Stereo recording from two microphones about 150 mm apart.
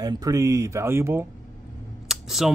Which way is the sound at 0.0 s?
25° right (ahead or behind).